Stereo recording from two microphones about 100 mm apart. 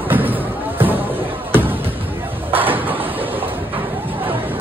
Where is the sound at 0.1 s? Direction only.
20° right (ahead or behind).